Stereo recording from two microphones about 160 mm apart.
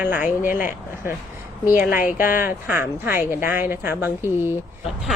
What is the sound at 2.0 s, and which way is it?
Speech, 60° left (ahead or behind).